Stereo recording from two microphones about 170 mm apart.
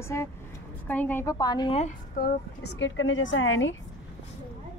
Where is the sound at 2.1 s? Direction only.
70° left (ahead or behind); by 3.7 s 90° left.